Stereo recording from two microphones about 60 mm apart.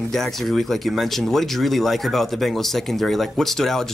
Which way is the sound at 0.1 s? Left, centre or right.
Centre.